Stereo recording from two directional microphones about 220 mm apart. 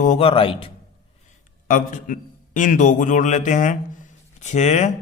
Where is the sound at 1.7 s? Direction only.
35° left (ahead or behind).